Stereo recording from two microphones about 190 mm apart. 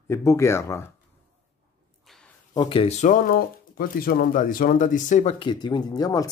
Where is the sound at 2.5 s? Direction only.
25° left (ahead or behind); by 5.3 s 40° left (ahead or behind).